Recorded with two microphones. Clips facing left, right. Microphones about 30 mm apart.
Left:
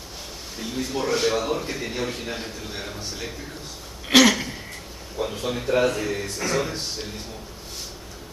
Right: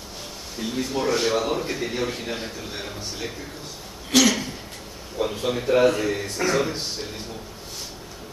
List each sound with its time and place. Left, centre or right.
0.6 s a man's voice: centre
4.1 s throat clearing: centre
5.1 s a man's voice: centre